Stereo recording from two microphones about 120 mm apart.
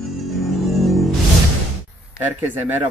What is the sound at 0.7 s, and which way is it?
Music, centre (ahead or behind).